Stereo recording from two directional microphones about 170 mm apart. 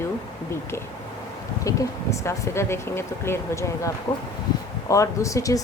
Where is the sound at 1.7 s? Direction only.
20° left (ahead or behind).